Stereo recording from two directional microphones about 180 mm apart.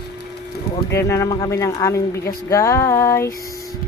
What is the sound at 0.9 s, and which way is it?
Speech, 15° left (ahead or behind).